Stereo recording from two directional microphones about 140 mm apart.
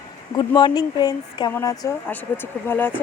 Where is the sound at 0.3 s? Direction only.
30° left (ahead or behind).